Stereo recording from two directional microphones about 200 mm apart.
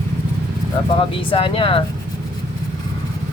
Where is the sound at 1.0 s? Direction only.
25° left (ahead or behind).